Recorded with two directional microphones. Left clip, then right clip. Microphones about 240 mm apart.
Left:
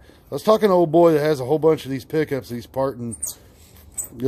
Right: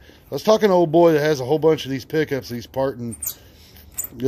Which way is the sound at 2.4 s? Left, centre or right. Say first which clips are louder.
Right 1 dB; left.